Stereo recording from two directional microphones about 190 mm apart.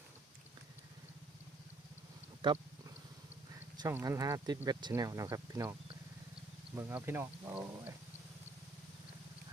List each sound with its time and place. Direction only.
3.8 s speech: 15° right (ahead or behind)
6.7 s speech: 10° right (ahead or behind)